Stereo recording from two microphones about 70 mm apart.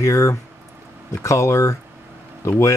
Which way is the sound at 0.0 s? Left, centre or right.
Left.